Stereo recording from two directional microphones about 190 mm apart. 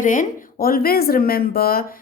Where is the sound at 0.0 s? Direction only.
45° left (ahead or behind).